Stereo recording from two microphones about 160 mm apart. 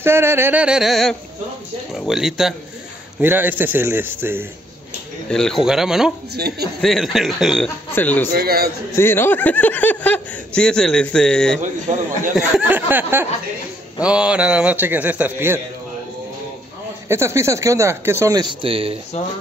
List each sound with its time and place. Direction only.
0.0 s speech: 15° right (ahead or behind)
5.3 s speech: 5° left (ahead or behind)
6.3 s a man's voice: 80° right
6.8 s speech: centre (ahead or behind)
7.9 s speech: 10° left (ahead or behind)
8.3 s a man's voice: 75° right (ahead or behind)
8.9 s speech: 15° left (ahead or behind)
11.6 s speech: 50° right (ahead or behind)
12.4 s speech: 5° right (ahead or behind)
17.1 s speech: 15° right (ahead or behind); by 18.9 s 35° right (ahead or behind)